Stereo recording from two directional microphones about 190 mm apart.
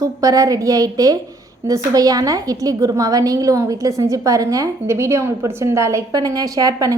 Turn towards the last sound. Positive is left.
turn(degrees=-20)  # may be behind; listen again after turning